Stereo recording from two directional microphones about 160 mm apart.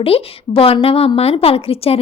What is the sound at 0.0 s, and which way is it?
A woman's voice, 35° left (ahead or behind).